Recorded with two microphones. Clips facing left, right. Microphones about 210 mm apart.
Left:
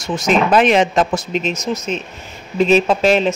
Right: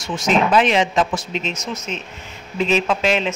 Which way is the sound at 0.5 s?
50° left (ahead or behind).